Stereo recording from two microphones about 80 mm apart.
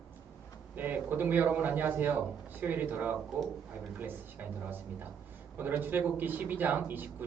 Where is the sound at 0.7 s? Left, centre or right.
Right.